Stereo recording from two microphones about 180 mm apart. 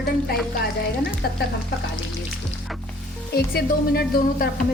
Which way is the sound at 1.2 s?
65° left (ahead or behind).